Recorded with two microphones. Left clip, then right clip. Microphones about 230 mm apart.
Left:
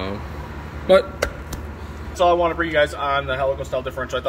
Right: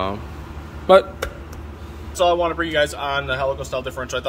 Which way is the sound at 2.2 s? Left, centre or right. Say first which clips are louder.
Left 1 dB; centre.